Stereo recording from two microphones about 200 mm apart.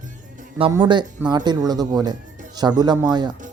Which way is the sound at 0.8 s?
20° right (ahead or behind).